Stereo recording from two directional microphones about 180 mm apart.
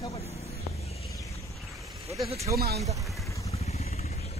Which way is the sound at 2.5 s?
60° right (ahead or behind).